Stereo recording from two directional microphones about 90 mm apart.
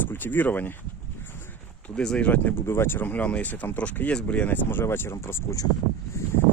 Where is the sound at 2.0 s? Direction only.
10° left (ahead or behind); by 5.6 s 30° left (ahead or behind).